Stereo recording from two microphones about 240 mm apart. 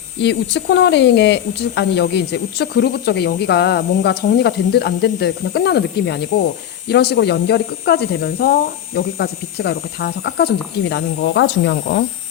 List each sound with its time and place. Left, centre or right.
0.2 s speech: left